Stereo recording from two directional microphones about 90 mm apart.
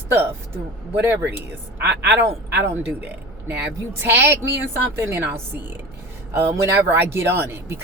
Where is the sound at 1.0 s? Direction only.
25° right (ahead or behind).